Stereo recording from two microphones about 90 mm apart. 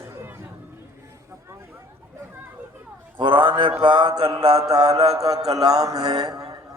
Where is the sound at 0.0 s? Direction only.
30° right (ahead or behind).